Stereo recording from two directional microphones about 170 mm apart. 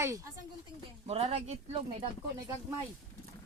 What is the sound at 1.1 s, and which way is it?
Speech, 35° right (ahead or behind).